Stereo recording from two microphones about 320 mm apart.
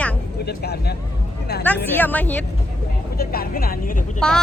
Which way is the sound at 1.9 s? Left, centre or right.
Centre.